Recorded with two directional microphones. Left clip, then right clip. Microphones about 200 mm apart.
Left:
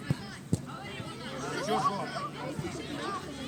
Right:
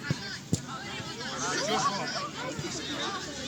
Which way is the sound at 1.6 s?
50° left (ahead or behind).